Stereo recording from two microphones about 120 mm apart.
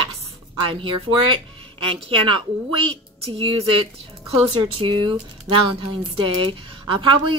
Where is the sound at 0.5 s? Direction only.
45° right (ahead or behind).